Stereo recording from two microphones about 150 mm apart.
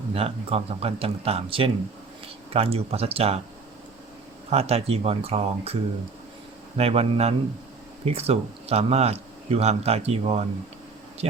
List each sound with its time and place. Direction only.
0.1 s speech: 40° right (ahead or behind)
4.4 s a man's voice: 45° right (ahead or behind)
6.7 s a man's voice: 40° right (ahead or behind)